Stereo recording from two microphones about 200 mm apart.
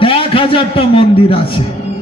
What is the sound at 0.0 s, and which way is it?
A man's voice, 25° left (ahead or behind).